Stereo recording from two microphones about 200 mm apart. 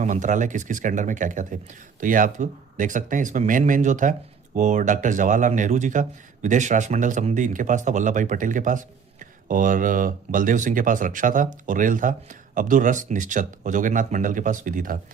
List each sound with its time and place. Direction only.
0.0 s speech: 40° right (ahead or behind)